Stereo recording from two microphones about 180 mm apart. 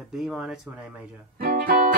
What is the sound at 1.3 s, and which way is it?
Speech, 55° right (ahead or behind).